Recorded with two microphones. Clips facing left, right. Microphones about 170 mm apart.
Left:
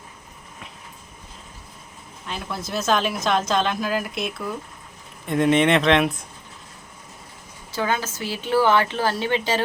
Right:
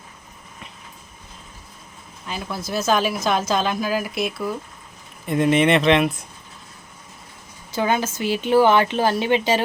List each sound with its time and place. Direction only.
2.2 s speech: 5° right (ahead or behind)
7.7 s speech: 20° right (ahead or behind)